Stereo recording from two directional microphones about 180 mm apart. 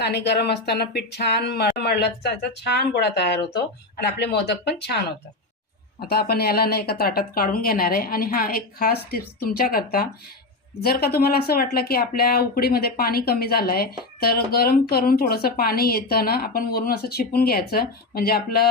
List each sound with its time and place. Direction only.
0.0 s speech: 65° left (ahead or behind)
6.1 s speech: 60° left (ahead or behind)